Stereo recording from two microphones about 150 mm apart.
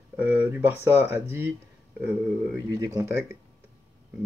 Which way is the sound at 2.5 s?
20° right (ahead or behind).